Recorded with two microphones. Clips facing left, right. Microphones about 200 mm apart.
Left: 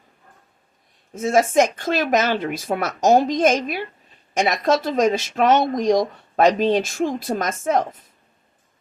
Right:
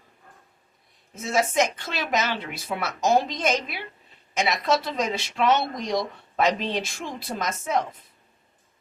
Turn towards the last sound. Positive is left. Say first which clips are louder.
# left 5 dB
turn(degrees=45)  # may be behind; listen again after turning